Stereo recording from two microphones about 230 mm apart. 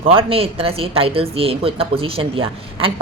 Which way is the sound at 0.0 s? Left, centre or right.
Right.